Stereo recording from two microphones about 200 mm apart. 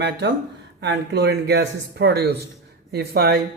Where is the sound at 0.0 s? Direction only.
60° right (ahead or behind).